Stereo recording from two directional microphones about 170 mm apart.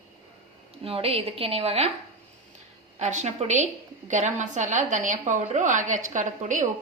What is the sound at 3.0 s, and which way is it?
A woman's voice, 45° right (ahead or behind).